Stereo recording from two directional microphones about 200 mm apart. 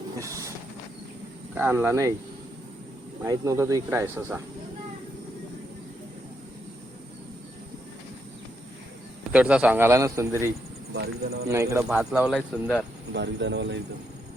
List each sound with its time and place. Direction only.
0.2 s train: 15° right (ahead or behind)
1.5 s a man's voice: 10° right (ahead or behind)
3.2 s a man's voice: 15° right (ahead or behind)
9.3 s a man's voice: 5° right (ahead or behind)
10.9 s speech: 55° right (ahead or behind)
11.4 s a man's voice: 15° right (ahead or behind); by 12.8 s 5° left (ahead or behind)
13.1 s speech: 60° right (ahead or behind)